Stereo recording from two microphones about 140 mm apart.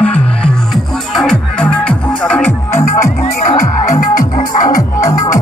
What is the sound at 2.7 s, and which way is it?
Music, 20° left (ahead or behind).